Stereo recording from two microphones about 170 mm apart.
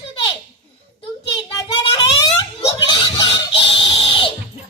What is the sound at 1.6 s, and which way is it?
Child singing, 30° left (ahead or behind).